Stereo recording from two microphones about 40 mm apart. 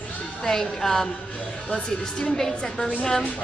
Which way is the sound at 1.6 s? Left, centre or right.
Left.